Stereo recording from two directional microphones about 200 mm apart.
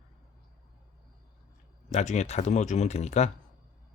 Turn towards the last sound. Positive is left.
turn(degrees=35)  # may be behind; listen again after turning